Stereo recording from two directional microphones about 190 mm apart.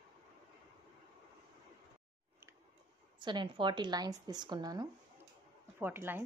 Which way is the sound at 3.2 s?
25° right (ahead or behind).